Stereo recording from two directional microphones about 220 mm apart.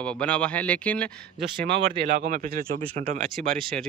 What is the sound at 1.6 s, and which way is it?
Speech, 35° right (ahead or behind).